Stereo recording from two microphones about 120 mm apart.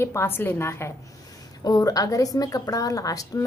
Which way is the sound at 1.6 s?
30° left (ahead or behind).